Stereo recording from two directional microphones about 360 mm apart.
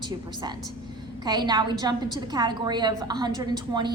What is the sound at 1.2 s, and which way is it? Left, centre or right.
A woman's voice, centre.